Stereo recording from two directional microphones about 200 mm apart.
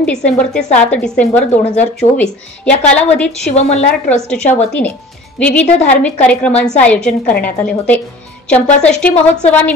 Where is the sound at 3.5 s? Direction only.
35° left (ahead or behind).